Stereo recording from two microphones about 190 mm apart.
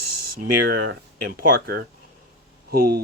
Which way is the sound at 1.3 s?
50° right (ahead or behind).